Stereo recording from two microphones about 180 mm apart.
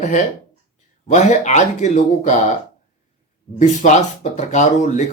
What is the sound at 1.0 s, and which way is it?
Speech, 40° left (ahead or behind).